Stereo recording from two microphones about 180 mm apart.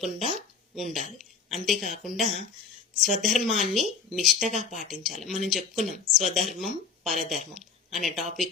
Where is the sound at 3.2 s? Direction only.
Centre (ahead or behind).